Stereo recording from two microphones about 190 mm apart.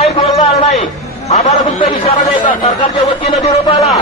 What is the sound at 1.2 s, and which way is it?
Speech, 35° left (ahead or behind).